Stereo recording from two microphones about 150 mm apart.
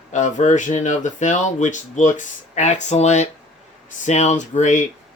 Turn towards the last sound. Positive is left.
turn(degrees=55)  # may be behind; listen again after turning